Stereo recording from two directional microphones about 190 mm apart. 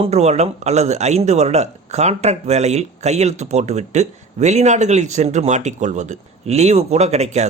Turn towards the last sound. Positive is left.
turn(degrees=-35)  # may be behind; listen again after turning